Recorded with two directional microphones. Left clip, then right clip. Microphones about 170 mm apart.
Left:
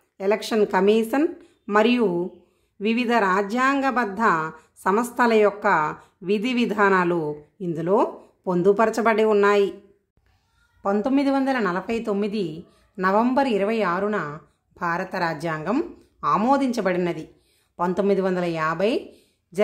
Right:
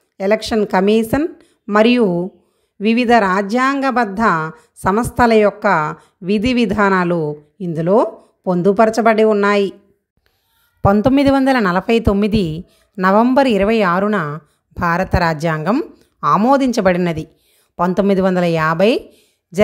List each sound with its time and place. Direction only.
0.2 s a woman's voice: 30° right (ahead or behind)
10.8 s speech: 45° right (ahead or behind)